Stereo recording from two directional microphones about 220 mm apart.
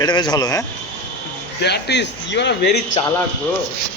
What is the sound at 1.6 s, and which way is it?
Speech, 50° left (ahead or behind).